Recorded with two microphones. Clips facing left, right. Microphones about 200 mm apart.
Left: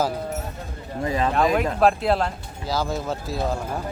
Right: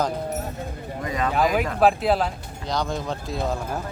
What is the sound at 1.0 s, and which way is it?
Speech, 30° left (ahead or behind).